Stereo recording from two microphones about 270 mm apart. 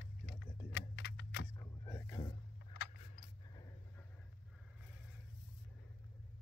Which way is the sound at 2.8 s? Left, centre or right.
Left.